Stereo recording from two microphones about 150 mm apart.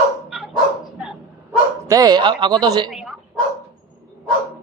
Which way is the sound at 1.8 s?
25° right (ahead or behind).